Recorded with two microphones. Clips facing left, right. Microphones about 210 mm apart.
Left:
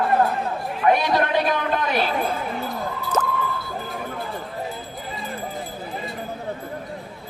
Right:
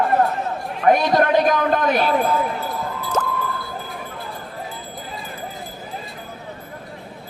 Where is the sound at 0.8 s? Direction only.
45° right (ahead or behind).